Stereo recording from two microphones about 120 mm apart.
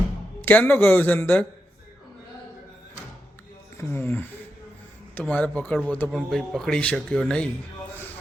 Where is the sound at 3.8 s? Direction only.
20° left (ahead or behind).